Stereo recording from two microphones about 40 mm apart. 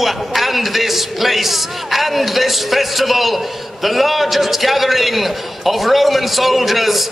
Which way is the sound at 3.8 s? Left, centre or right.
Centre.